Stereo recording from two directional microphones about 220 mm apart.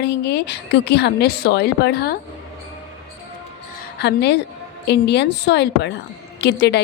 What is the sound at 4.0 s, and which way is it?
A woman's voice, 50° left (ahead or behind).